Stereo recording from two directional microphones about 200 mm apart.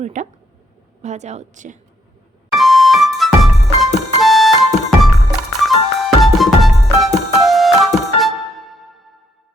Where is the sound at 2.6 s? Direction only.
Centre (ahead or behind).